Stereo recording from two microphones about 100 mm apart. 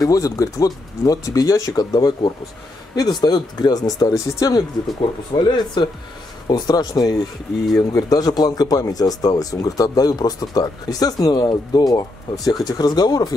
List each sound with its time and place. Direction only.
0.0 s speech: 35° left (ahead or behind)
5.3 s speech: 50° left (ahead or behind)